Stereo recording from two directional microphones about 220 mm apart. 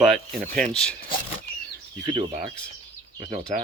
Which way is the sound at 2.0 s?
25° right (ahead or behind).